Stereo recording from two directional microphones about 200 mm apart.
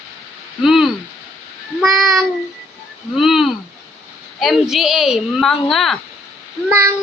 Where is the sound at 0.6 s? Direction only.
Centre (ahead or behind).